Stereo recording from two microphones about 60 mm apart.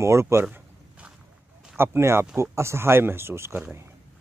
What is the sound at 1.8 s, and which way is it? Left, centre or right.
Speech, right.